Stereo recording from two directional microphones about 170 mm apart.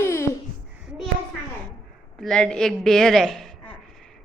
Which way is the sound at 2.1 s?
5° left (ahead or behind).